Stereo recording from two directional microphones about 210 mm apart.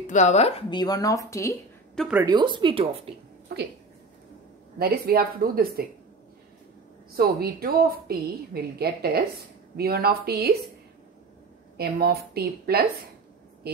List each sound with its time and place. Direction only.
0.0 s speech: 35° left (ahead or behind); by 1.6 s 15° left (ahead or behind)
2.0 s a woman's voice: 5° right (ahead or behind)
2.2 s speech: 20° right (ahead or behind)
4.7 s a woman's voice: 45° right (ahead or behind)
7.2 s a woman's voice: 45° right (ahead or behind)
11.7 s a woman's voice: 50° right (ahead or behind)